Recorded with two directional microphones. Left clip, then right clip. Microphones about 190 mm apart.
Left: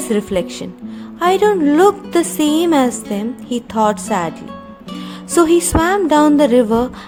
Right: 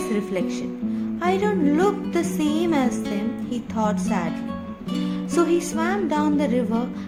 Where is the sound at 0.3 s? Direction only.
50° left (ahead or behind).